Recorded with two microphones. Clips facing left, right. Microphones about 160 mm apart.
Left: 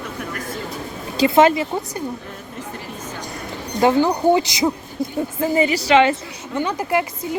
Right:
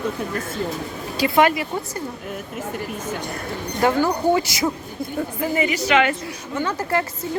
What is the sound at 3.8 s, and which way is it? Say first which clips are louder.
Speech: left 3 dB; 20° left (ahead or behind).